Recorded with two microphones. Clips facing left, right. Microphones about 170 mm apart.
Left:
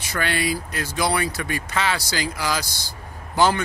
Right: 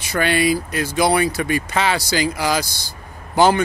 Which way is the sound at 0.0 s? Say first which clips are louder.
Right 6 dB; 15° right (ahead or behind).